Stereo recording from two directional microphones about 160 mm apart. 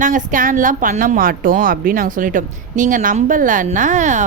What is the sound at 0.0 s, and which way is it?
A woman's voice, 55° right (ahead or behind).